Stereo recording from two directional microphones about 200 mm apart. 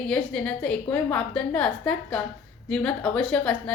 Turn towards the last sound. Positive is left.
turn(degrees=5)  # may be behind; listen again after turning